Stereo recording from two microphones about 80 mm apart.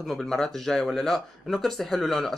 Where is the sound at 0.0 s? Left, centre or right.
Centre.